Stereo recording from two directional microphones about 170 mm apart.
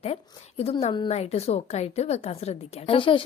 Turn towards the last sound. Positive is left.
turn(degrees=30)  # may be behind; listen again after turning